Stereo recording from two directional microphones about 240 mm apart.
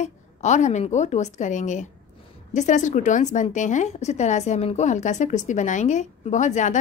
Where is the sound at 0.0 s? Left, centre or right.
Left.